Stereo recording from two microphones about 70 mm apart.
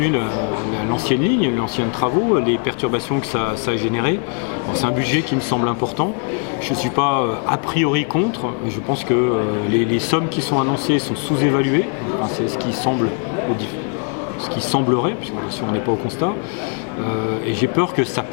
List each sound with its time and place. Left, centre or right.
0.0 s music: centre
1.0 s speech: centre
5.0 s speech: centre
6.9 s speech: centre
14.8 s speech: centre
17.6 s speech: centre